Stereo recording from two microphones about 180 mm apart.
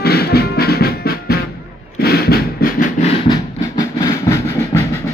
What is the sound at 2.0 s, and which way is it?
Drum, 60° left (ahead or behind).